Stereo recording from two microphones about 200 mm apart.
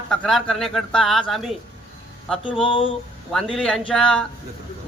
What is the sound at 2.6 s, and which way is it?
Speech, 25° left (ahead or behind).